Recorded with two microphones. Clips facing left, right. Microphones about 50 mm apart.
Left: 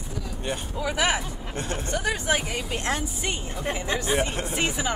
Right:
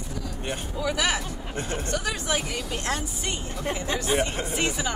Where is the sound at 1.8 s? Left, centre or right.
Left.